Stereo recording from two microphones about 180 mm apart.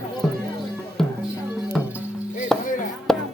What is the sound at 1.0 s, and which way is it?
Music, centre (ahead or behind).